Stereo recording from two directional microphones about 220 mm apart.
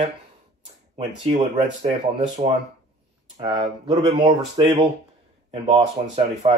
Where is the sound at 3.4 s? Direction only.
20° right (ahead or behind).